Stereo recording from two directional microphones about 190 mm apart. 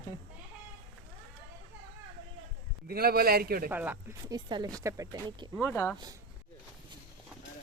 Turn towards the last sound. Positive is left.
turn(degrees=10)  # may be behind; listen again after turning